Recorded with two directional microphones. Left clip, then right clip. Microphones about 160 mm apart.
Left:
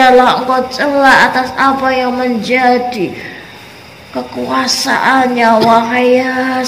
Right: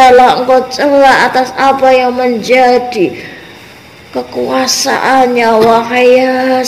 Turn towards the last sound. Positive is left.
turn(degrees=-55)  # may be behind; listen again after turning